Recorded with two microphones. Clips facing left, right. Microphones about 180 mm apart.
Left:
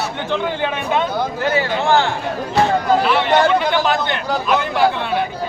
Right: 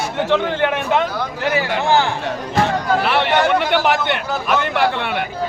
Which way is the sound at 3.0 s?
65° right (ahead or behind).